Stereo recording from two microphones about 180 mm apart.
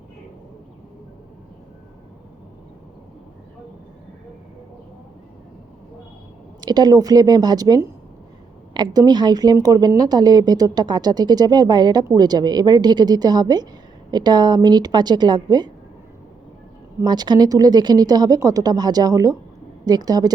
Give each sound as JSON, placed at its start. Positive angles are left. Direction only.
{"t": 6.6, "sound": "a woman's voice", "side_deg": -20}
{"t": 17.0, "sound": "a woman's voice", "side_deg": -25}